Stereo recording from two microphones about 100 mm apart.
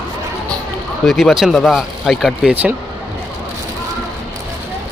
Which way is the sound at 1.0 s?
Centre (ahead or behind).